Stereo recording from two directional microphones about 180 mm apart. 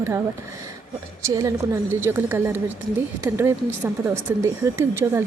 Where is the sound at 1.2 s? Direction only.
20° right (ahead or behind).